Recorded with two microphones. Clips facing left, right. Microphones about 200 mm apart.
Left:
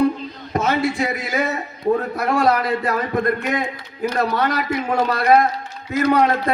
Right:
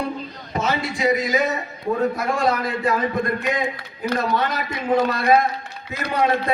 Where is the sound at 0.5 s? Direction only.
55° left (ahead or behind).